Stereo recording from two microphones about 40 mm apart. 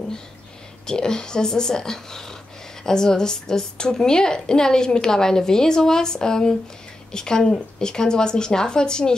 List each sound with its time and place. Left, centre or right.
0.8 s a woman's voice: centre